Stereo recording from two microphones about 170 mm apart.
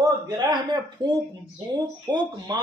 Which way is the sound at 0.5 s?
25° right (ahead or behind).